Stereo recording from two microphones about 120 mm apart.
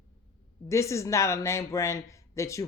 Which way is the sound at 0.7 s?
25° left (ahead or behind).